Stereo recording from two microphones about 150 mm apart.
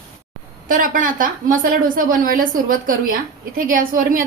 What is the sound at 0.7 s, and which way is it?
A woman's voice, 65° right (ahead or behind).